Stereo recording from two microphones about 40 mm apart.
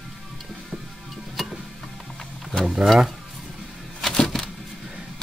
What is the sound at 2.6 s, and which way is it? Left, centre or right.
Speech, centre.